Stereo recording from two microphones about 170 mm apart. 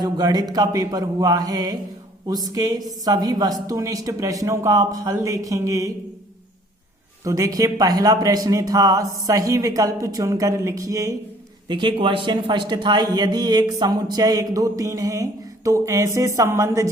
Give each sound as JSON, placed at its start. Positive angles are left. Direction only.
{"t": 0.0, "sound": "speech", "side_deg": -25}
{"t": 7.3, "sound": "speech", "side_deg": -20}